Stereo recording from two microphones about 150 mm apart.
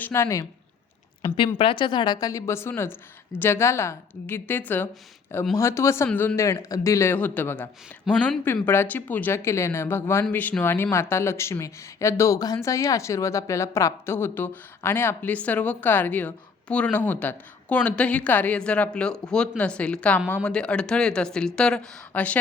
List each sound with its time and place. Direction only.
0.0 s a woman's voice: 20° left (ahead or behind)
1.5 s a woman's voice: 35° left (ahead or behind); by 22.4 s 10° left (ahead or behind)